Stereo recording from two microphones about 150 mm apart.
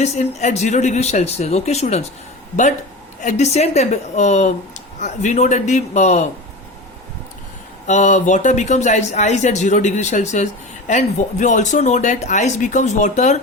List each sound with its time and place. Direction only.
0.0 s a man's voice: 50° left (ahead or behind)
3.2 s a man's voice: 50° left (ahead or behind)
7.9 s a man's voice: 55° left (ahead or behind)